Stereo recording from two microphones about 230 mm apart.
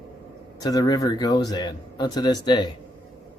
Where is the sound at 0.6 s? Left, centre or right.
Centre.